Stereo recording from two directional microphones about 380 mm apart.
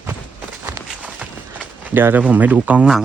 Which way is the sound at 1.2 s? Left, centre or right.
Centre.